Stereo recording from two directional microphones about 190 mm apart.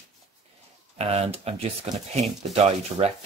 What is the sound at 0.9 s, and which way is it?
Speech, 30° right (ahead or behind).